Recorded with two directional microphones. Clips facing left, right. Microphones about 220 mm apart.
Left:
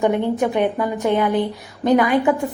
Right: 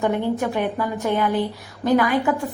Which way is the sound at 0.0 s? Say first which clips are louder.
Left 3 dB; 15° left (ahead or behind).